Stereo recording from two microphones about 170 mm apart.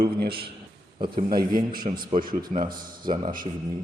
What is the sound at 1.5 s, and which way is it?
A man's voice, 55° right (ahead or behind).